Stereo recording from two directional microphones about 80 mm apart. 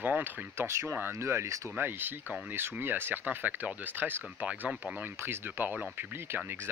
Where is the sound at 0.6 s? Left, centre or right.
Right; by 4.9 s centre.